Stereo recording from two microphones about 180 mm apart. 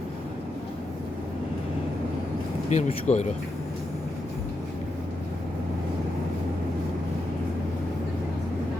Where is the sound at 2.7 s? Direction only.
40° left (ahead or behind).